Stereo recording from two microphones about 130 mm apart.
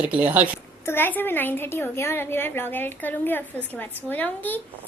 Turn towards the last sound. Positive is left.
turn(degrees=15)  # may be behind; listen again after turning